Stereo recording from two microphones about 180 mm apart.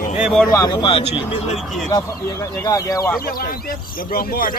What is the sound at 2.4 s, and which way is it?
Speech, 20° left (ahead or behind).